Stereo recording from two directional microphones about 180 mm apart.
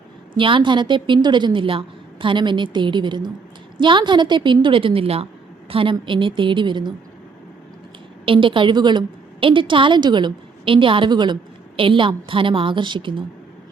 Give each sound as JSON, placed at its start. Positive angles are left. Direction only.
{"t": 0.3, "sound": "a woman's voice", "side_deg": -30}
{"t": 8.2, "sound": "a woman's voice", "side_deg": -30}